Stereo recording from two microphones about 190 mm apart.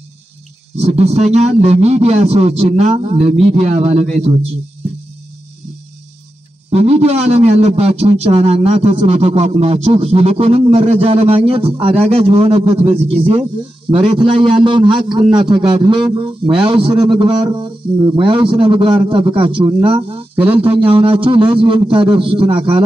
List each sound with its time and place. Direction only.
0.7 s a man's voice: 35° right (ahead or behind)
6.7 s a man's voice: 35° right (ahead or behind)